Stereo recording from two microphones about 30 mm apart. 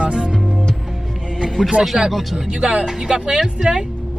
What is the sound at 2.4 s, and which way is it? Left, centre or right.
Speech, right.